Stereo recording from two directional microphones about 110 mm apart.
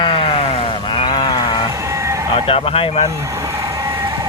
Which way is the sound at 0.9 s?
50° left (ahead or behind).